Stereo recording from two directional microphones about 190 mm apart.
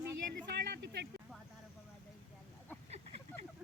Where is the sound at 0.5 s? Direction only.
60° right (ahead or behind).